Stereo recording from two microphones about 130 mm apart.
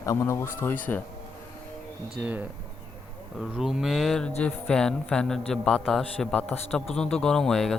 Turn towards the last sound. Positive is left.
turn(degrees=5)  # may be behind; listen again after turning